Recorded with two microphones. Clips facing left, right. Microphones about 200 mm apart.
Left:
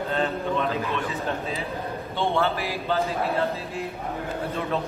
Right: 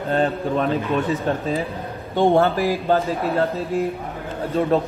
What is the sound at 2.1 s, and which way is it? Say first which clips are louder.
Speech: right 8 dB; 45° right (ahead or behind).